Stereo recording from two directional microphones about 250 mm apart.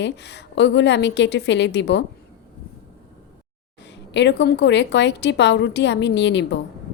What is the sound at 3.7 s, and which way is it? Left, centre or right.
Speech, left.